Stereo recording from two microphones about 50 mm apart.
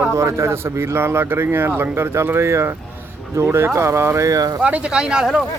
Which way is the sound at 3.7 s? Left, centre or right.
Right.